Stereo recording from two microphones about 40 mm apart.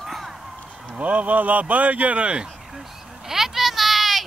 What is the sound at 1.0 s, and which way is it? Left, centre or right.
Speech, right.